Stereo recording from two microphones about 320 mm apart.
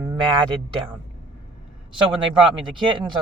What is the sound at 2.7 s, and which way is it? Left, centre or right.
Speech, centre.